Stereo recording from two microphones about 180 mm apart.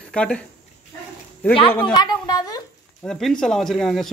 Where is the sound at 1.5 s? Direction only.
30° left (ahead or behind).